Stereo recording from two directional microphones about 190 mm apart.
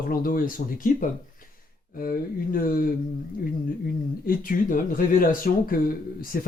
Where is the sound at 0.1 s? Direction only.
50° left (ahead or behind).